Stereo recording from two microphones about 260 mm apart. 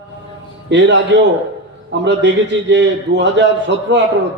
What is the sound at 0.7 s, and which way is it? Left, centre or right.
A man's voice, right.